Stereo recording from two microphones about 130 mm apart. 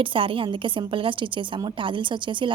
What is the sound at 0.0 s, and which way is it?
A woman's voice, 40° right (ahead or behind).